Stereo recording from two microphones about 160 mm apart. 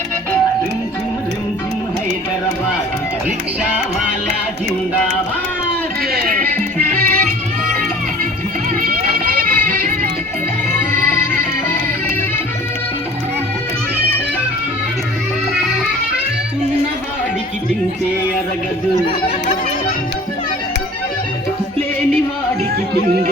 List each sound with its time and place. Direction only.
8.8 s music: 65° right (ahead or behind)